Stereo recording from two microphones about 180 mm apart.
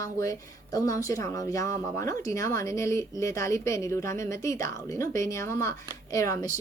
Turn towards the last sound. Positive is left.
turn(degrees=15)  # may be behind; listen again after turning